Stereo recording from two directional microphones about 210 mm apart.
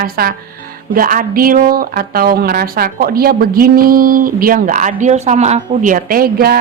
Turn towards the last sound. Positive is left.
turn(degrees=-45)  # may be behind; listen again after turning